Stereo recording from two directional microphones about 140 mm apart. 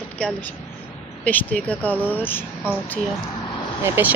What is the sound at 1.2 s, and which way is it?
Speech, 10° left (ahead or behind).